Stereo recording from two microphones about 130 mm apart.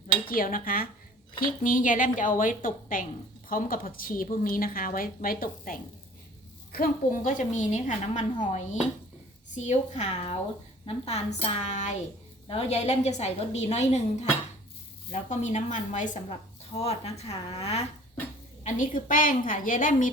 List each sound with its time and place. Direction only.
0.3 s a woman's voice: 90° left
7.1 s a woman's voice: 90° left; by 12.0 s 65° left (ahead or behind)
12.5 s a woman's voice: 50° left (ahead or behind)
15.1 s speech: 70° left (ahead or behind)
16.7 s a woman's voice: 55° left (ahead or behind)
18.6 s a woman's voice: 85° left